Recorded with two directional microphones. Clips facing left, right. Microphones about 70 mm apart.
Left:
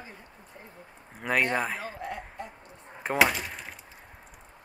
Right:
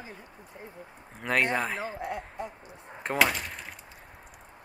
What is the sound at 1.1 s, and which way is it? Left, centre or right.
Speech, centre.